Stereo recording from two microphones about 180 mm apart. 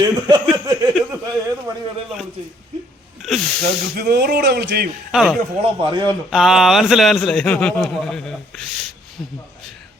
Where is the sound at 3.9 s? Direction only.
65° right (ahead or behind).